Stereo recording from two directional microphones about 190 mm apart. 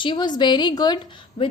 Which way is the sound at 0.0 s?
25° left (ahead or behind).